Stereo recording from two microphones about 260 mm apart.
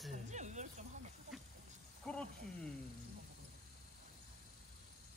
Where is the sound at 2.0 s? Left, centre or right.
Centre.